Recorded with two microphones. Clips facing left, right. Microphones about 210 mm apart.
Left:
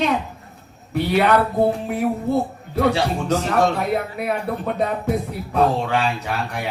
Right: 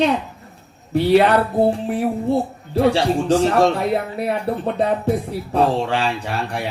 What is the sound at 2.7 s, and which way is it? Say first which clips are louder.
Speech: right 3 dB; 30° right (ahead or behind).